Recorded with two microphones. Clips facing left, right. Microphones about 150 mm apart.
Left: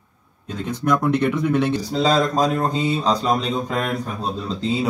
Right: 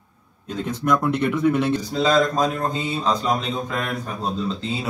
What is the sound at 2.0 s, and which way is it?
Speech, 35° left (ahead or behind).